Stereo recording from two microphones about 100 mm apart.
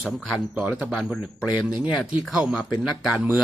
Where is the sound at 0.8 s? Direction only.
Centre (ahead or behind).